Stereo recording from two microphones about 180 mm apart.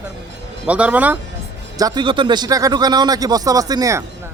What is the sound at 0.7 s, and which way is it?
Speech, 5° right (ahead or behind).